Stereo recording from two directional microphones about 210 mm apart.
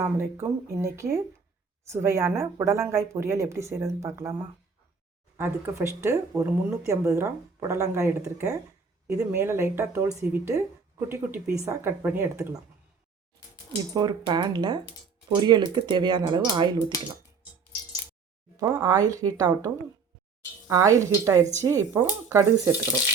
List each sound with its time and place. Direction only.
0.0 s speech: 10° right (ahead or behind)
5.4 s speech: 10° right (ahead or behind)
13.9 s speech: 20° right (ahead or behind)
18.5 s speech: 15° right (ahead or behind)